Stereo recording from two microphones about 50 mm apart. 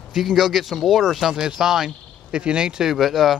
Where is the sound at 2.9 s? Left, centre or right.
Centre.